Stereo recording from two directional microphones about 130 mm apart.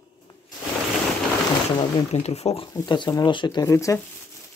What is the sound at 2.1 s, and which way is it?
Speech, 55° left (ahead or behind).